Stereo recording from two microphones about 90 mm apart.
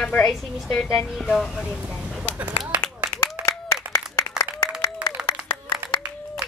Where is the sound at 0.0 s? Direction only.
10° left (ahead or behind).